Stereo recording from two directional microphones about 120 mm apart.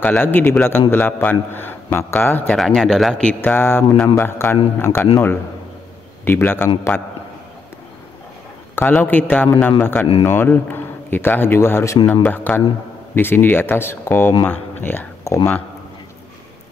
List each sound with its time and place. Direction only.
0.0 s a man's voice: 15° left (ahead or behind)
2.5 s speech: centre (ahead or behind)
3.3 s a man's voice: 20° left (ahead or behind)
6.2 s a man's voice: 15° left (ahead or behind)
8.7 s a man's voice: 15° left (ahead or behind)